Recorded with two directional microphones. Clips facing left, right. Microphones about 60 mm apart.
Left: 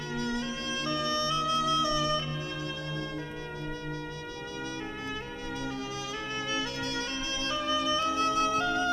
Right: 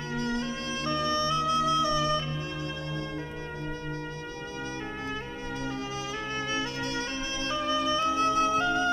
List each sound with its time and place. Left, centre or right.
0.2 s music: right
6.3 s music: right